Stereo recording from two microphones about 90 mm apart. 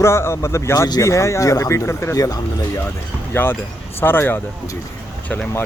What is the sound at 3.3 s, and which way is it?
Speech, 25° left (ahead or behind).